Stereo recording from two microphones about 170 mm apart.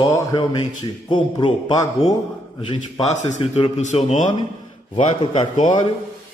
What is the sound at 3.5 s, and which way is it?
Speech, 40° left (ahead or behind).